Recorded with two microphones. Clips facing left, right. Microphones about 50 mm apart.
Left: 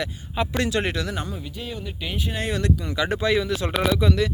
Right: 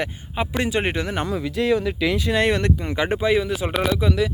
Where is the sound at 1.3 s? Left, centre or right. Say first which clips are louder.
Right 13 dB; right.